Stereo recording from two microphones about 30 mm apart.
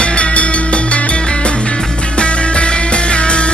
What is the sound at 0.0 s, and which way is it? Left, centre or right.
Music, left.